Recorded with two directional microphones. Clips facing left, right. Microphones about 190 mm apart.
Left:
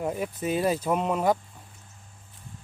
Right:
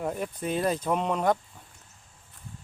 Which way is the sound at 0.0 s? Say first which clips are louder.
Left 2 dB; 5° left (ahead or behind).